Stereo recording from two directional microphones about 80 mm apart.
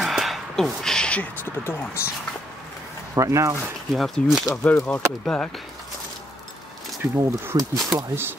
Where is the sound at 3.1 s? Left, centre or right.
Right.